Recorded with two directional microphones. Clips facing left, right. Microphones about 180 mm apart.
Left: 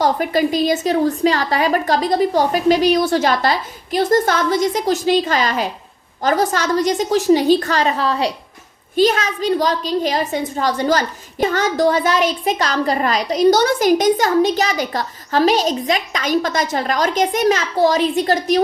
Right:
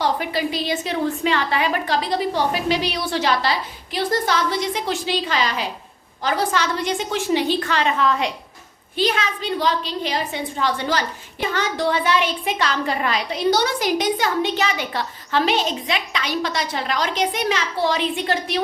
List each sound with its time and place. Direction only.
0.0 s a woman's voice: 45° left (ahead or behind)